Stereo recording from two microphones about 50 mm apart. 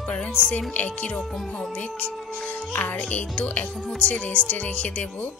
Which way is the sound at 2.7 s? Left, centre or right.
Left.